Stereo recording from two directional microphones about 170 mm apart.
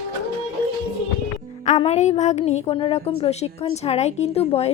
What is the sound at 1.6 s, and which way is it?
A woman's voice, 40° left (ahead or behind).